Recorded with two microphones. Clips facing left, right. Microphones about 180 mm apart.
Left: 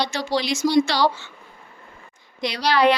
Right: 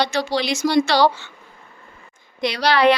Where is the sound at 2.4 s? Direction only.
65° right (ahead or behind).